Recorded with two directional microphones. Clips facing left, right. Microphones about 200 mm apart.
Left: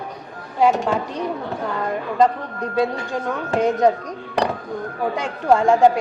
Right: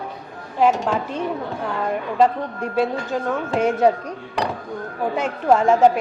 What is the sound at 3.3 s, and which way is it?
Speech, 10° right (ahead or behind).